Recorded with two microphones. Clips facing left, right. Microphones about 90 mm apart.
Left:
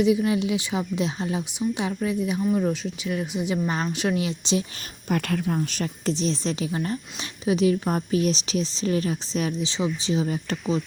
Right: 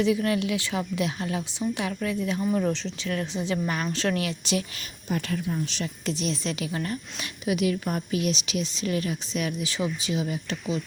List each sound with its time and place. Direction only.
0.0 s speech: 20° left (ahead or behind)
2.4 s speech: centre (ahead or behind); by 4.6 s 25° left (ahead or behind)
5.0 s a woman's voice: 60° left (ahead or behind); by 6.1 s 45° left (ahead or behind)
6.1 s speech: 35° left (ahead or behind)
6.7 s speech: 25° left (ahead or behind); by 10.8 s 40° left (ahead or behind)